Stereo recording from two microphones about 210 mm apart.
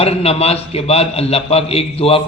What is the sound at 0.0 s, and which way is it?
A man's voice, 30° left (ahead or behind).